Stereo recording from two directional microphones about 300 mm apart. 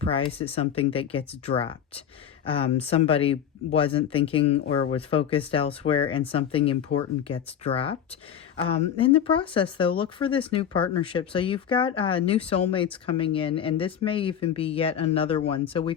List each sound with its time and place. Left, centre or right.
0.0 s speech: centre